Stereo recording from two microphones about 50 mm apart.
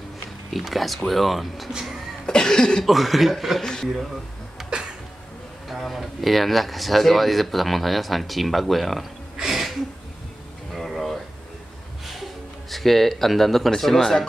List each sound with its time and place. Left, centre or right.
0.5 s speech: centre
1.7 s speech: centre
2.2 s cough: centre
2.8 s speech: centre
5.7 s speech: centre
9.4 s a sound: centre
12.1 s speech: centre